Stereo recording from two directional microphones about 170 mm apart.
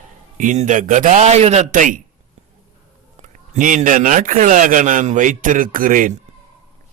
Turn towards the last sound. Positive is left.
turn(degrees=-50)  # may be behind; listen again after turning